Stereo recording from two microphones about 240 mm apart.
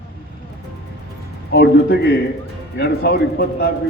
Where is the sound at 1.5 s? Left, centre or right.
Left.